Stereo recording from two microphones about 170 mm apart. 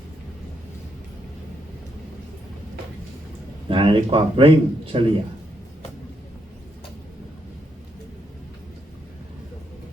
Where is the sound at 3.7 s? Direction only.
30° right (ahead or behind).